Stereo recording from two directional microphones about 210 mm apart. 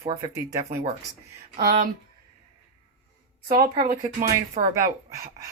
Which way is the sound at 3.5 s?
45° right (ahead or behind).